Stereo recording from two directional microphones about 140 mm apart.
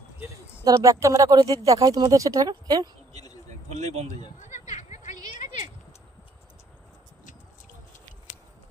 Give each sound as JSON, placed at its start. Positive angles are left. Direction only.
{"t": 0.7, "sound": "speech", "side_deg": -25}
{"t": 3.7, "sound": "speech", "side_deg": -55}
{"t": 4.6, "sound": "a sound", "side_deg": 55}